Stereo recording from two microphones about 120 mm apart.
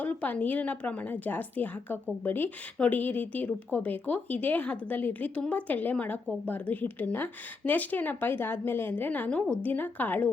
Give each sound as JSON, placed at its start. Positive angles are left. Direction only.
{"t": 0.0, "sound": "a woman's voice", "side_deg": 10}